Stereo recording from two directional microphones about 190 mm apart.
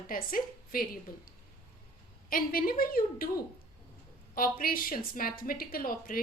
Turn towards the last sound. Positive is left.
turn(degrees=50)  # may be behind; listen again after turning